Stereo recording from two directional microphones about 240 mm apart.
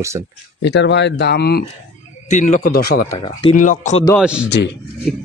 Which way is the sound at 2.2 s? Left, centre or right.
Left.